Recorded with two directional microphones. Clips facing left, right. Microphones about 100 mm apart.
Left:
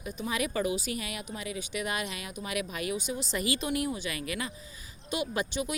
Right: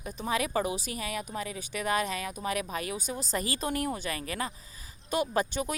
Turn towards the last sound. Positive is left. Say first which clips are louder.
# right 3 dB
turn(degrees=-45)  # may be behind; listen again after turning